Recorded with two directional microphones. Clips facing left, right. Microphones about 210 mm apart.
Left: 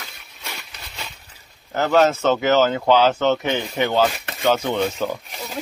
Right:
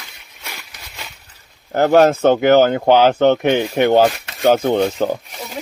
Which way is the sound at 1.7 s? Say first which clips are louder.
Right 5 dB; 50° right (ahead or behind).